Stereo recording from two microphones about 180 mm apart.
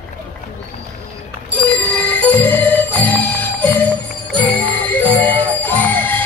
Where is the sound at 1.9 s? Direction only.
10° left (ahead or behind).